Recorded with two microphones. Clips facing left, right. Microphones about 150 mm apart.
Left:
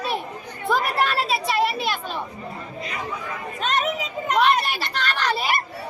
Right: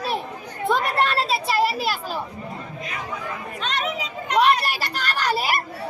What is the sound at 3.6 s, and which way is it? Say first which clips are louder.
Speech: left 3 dB; 45° left (ahead or behind).